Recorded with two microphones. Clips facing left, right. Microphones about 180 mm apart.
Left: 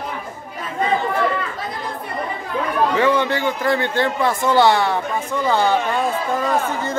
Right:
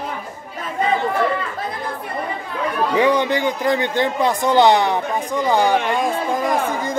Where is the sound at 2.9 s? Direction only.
15° right (ahead or behind).